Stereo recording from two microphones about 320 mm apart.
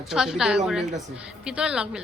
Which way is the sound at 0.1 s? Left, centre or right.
Centre.